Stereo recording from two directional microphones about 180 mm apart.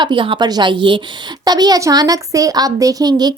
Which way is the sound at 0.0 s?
25° right (ahead or behind).